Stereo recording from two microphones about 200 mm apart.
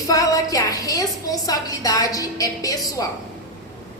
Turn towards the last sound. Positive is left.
turn(degrees=15)  # may be behind; listen again after turning